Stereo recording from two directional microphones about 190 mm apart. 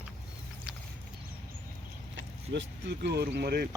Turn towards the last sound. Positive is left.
turn(degrees=-60)  # may be behind; listen again after turning